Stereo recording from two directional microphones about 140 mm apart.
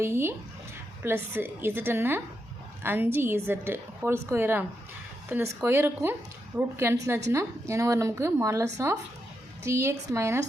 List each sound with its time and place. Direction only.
0.0 s a woman's voice: 20° right (ahead or behind)